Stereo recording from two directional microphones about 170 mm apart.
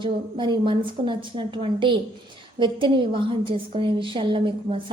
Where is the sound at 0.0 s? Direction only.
30° right (ahead or behind).